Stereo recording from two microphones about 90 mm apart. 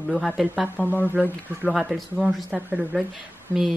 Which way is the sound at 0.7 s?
20° left (ahead or behind).